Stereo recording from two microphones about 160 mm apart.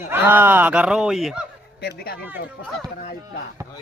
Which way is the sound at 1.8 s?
85° left.